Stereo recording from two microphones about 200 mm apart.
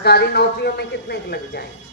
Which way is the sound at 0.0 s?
55° left (ahead or behind).